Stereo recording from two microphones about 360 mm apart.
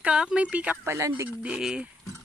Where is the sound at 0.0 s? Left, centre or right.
Centre.